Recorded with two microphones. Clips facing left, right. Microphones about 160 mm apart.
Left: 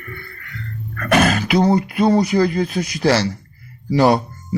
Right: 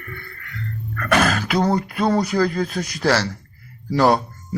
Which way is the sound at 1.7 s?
5° left (ahead or behind).